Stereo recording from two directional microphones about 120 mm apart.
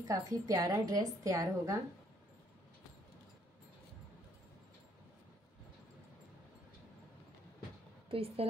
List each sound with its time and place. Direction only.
0.0 s a woman's voice: 30° right (ahead or behind)
8.1 s speech: 55° right (ahead or behind)